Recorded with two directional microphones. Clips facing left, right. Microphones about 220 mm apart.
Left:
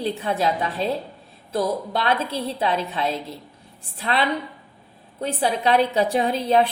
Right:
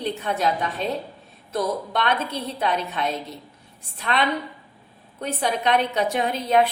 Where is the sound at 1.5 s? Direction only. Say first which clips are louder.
Left 2 dB; 30° left (ahead or behind).